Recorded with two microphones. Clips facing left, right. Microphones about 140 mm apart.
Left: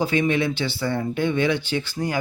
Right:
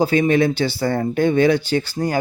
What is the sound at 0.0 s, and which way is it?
Speech, 40° right (ahead or behind).